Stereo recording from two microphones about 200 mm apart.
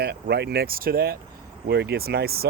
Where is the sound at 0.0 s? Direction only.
55° right (ahead or behind).